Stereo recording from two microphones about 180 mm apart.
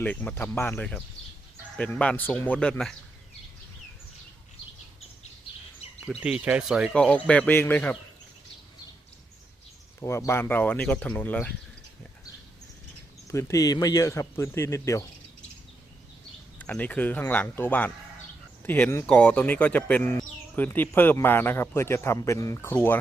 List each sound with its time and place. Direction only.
0.0 s speech: 10° left (ahead or behind)
6.1 s speech: 5° right (ahead or behind)
10.0 s speech: 15° left (ahead or behind)
13.2 s speech: 15° left (ahead or behind)
16.6 s speech: 10° left (ahead or behind)